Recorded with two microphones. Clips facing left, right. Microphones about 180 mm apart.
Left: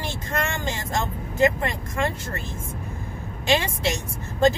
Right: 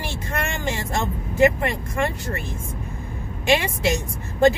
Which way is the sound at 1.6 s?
20° right (ahead or behind).